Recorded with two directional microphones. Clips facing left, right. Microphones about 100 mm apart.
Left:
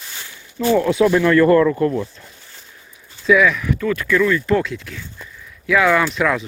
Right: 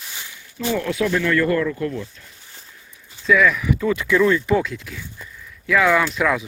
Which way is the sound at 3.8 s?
15° right (ahead or behind).